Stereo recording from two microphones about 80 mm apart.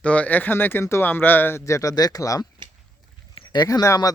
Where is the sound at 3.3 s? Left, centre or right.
Left.